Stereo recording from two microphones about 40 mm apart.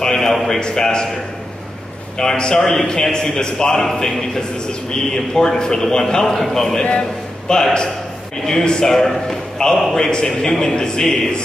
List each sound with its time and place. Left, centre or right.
0.0 s a sound: centre
0.6 s a man's voice: centre
2.1 s a man's voice: centre